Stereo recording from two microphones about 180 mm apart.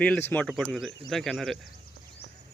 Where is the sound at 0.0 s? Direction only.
10° left (ahead or behind).